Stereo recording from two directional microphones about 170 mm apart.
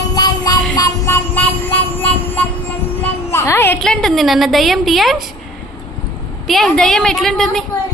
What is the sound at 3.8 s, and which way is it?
A woman's voice, centre (ahead or behind).